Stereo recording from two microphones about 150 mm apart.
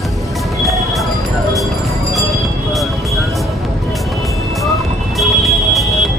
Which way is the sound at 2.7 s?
Centre (ahead or behind).